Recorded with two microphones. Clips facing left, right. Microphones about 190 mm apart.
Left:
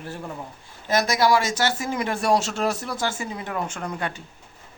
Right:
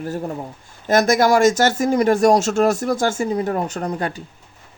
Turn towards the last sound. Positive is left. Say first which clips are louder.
# right 6 dB
turn(degrees=-35)  # may be behind; listen again after turning